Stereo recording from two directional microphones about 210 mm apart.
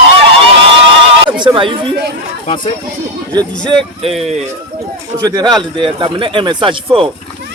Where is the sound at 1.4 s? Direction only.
25° right (ahead or behind).